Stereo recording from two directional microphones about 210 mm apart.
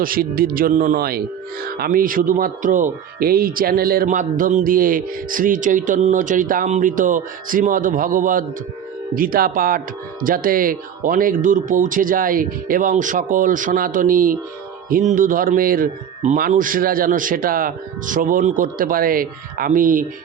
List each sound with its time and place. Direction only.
0.0 s speech: 45° right (ahead or behind)